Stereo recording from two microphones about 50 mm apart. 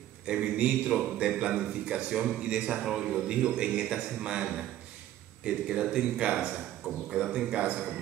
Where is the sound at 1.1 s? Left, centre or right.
Right.